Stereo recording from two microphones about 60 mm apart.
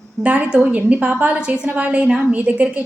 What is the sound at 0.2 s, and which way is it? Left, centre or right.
A woman's voice, right.